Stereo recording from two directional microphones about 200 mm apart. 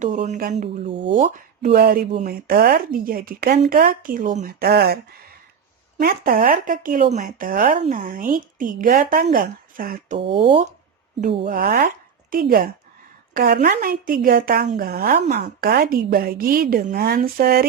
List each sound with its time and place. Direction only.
0.5 s speech: 35° right (ahead or behind)
1.7 s a woman's voice: 50° right (ahead or behind)
10.3 s speech: 25° right (ahead or behind)
11.4 s a woman's voice: 45° right (ahead or behind)